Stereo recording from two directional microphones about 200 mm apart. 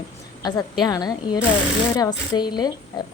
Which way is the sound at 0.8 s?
20° left (ahead or behind).